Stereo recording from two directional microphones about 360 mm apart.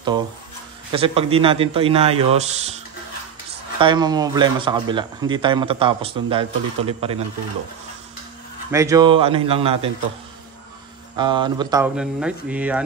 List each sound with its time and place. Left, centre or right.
0.9 s speech: centre
3.8 s speech: centre
8.7 s speech: centre
11.1 s speech: centre